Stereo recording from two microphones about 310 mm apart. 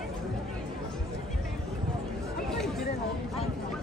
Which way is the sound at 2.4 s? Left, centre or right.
Centre.